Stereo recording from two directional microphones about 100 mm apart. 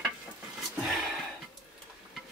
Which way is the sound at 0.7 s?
Centre (ahead or behind).